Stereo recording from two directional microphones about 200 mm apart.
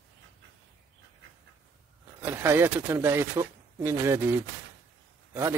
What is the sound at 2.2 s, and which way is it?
Speech, 10° right (ahead or behind).